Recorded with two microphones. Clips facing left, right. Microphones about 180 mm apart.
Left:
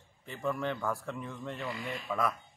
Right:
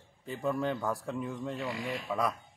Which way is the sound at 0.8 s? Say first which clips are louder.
Right 2 dB; 15° right (ahead or behind).